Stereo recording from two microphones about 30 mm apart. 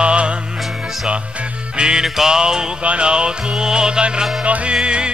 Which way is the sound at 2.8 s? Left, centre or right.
Right.